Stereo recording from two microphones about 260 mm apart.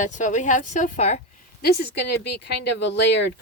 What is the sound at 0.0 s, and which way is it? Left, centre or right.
A woman's voice, left.